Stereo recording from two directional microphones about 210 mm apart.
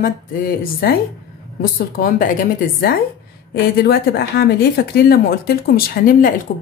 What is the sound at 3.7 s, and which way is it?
A woman's voice, 50° left (ahead or behind).